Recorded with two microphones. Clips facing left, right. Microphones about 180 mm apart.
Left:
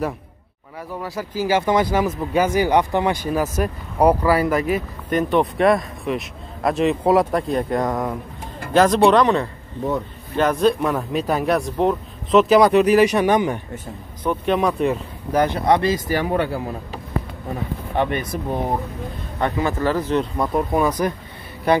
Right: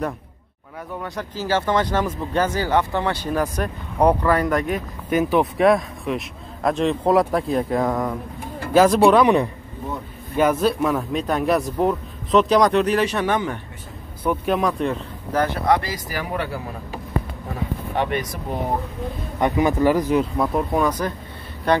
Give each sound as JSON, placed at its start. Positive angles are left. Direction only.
{"t": 0.9, "sound": "speech", "side_deg": 5}
{"t": 14.2, "sound": "speech", "side_deg": -5}
{"t": 15.3, "sound": "speech", "side_deg": 20}
{"t": 19.4, "sound": "speech", "side_deg": -15}
{"t": 20.4, "sound": "speech", "side_deg": 5}